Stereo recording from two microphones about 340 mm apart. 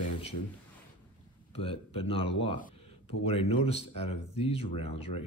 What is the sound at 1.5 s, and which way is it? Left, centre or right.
Speech, centre.